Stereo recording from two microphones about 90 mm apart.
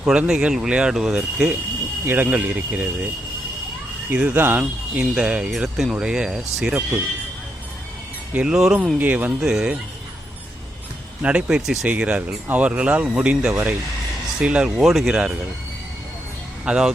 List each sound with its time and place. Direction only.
0.0 s speech: 10° right (ahead or behind)
2.0 s speech: 20° right (ahead or behind)
4.1 s speech: 15° right (ahead or behind)
8.3 s speech: 10° right (ahead or behind)
11.2 s speech: 15° right (ahead or behind)
11.9 s speech: 15° right (ahead or behind)
13.5 s speech: 25° right (ahead or behind)
14.4 s speech: 10° right (ahead or behind)
16.6 s speech: 5° right (ahead or behind)